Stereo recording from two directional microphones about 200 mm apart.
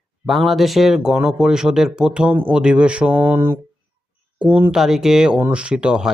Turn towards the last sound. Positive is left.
turn(degrees=-5)  # may be behind; listen again after turning